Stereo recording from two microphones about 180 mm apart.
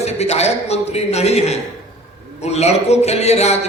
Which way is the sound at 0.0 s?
35° left (ahead or behind).